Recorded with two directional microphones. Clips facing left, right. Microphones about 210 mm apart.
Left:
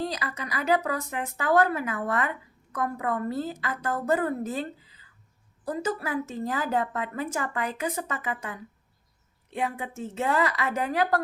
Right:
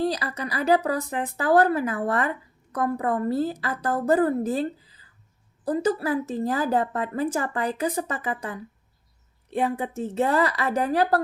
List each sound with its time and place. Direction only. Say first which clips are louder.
0.0 s a woman's voice: right 6 dB; 35° right (ahead or behind)